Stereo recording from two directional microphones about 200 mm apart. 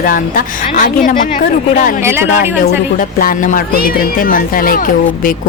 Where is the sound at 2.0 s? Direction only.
10° right (ahead or behind).